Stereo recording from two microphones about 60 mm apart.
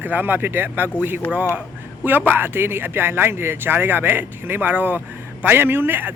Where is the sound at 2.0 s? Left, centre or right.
Right.